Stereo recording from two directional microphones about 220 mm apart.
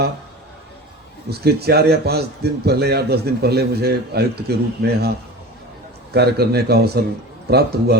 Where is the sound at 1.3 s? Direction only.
45° right (ahead or behind).